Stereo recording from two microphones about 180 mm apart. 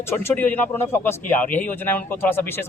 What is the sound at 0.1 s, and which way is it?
A man's voice, 15° left (ahead or behind).